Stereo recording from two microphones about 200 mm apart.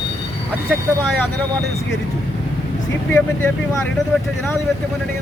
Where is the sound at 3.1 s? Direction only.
10° left (ahead or behind).